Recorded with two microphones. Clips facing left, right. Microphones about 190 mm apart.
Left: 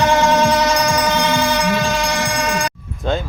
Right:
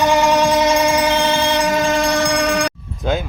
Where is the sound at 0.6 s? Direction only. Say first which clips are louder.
Right 2 dB; 30° right (ahead or behind); by 2.7 s 60° right (ahead or behind).